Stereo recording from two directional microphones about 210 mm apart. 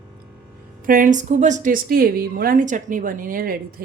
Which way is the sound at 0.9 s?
40° right (ahead or behind).